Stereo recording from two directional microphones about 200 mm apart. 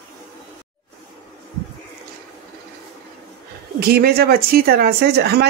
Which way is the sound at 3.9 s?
50° right (ahead or behind).